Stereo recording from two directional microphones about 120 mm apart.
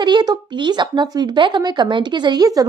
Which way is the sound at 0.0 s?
35° right (ahead or behind).